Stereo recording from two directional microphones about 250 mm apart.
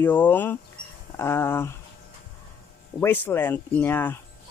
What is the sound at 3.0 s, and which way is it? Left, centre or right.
Speech, centre.